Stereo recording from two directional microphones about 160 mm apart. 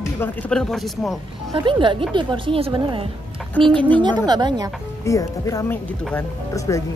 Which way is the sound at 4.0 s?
25° right (ahead or behind).